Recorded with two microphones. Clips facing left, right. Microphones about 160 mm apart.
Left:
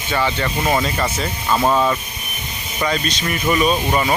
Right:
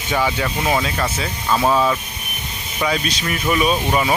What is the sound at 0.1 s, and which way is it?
Speech, 10° right (ahead or behind).